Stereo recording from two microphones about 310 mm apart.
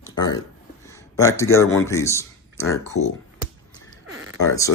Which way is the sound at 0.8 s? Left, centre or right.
Centre.